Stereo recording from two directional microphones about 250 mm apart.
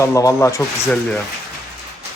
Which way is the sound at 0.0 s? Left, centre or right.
Centre.